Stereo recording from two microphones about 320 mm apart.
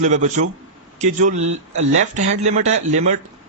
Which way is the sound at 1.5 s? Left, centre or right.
Right.